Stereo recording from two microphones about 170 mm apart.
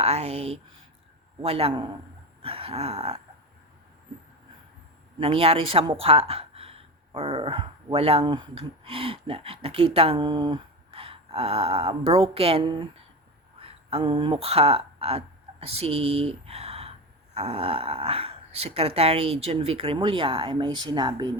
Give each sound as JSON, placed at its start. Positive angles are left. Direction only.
{"t": 0.0, "sound": "speech", "side_deg": -40}
{"t": 2.4, "sound": "a sound", "side_deg": -35}
{"t": 5.2, "sound": "speech", "side_deg": -35}